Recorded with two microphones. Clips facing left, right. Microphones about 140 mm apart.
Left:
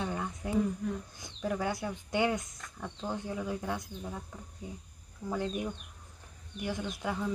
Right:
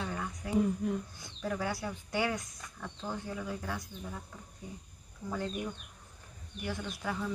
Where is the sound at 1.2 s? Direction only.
15° left (ahead or behind).